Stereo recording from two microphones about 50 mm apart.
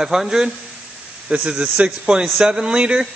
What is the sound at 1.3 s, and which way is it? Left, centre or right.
A man's voice, right.